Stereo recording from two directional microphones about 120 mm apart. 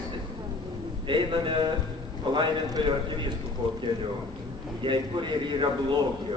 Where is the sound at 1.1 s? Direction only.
45° right (ahead or behind).